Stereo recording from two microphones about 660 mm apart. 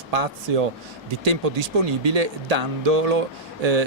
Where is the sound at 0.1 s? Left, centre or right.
Right.